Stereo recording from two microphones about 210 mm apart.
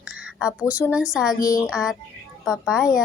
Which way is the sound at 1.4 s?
15° left (ahead or behind).